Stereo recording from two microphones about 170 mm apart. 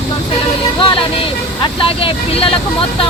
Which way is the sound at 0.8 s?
30° left (ahead or behind).